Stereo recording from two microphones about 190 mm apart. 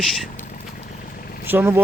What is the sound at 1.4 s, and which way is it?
Speech, 10° right (ahead or behind).